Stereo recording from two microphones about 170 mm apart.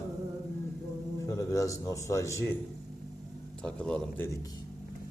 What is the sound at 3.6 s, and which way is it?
Speech, 5° left (ahead or behind).